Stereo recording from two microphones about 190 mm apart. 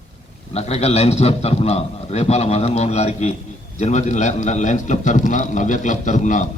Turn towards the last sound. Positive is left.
turn(degrees=40)  # may be behind; listen again after turning